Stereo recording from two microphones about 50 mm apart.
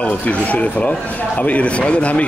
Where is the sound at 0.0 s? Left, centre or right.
Left.